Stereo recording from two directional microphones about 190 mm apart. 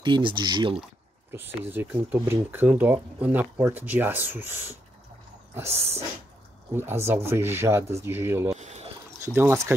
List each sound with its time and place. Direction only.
0.0 s speech: 25° right (ahead or behind)
1.3 s speech: 10° right (ahead or behind)
8.5 s a sound: 35° right (ahead or behind)
9.2 s speech: 10° right (ahead or behind)